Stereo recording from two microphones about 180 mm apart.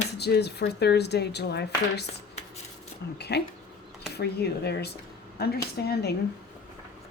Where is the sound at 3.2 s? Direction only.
65° left (ahead or behind).